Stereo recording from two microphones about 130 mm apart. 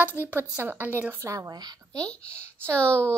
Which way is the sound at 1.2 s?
25° right (ahead or behind).